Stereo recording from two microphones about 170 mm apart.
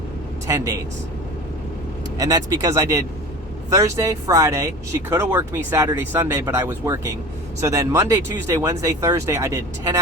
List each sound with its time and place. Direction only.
0.4 s speech: 20° right (ahead or behind)
2.1 s speech: 20° right (ahead or behind)